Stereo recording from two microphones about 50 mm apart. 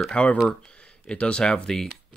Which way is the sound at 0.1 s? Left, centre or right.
Left.